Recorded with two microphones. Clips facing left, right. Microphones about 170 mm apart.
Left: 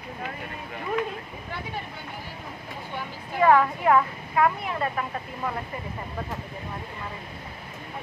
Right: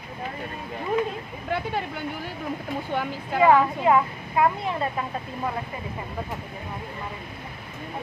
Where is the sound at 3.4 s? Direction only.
15° right (ahead or behind).